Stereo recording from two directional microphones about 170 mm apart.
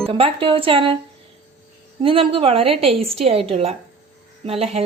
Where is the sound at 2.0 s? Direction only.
30° right (ahead or behind).